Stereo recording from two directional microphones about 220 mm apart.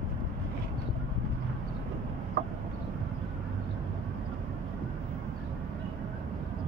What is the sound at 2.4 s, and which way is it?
Chicken, 50° right (ahead or behind).